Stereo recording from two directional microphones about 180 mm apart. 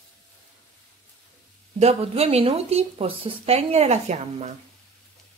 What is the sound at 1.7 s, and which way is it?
Speech, 35° right (ahead or behind).